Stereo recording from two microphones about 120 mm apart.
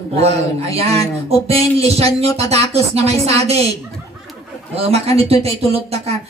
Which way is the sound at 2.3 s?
60° right (ahead or behind).